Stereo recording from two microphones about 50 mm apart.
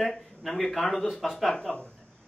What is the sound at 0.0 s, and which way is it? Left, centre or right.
Speech, centre.